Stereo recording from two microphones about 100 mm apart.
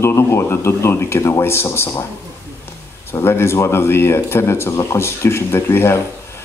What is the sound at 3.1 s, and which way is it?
A man's voice, 25° left (ahead or behind).